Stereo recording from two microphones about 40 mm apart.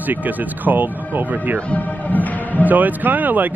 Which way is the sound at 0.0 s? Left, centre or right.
Right.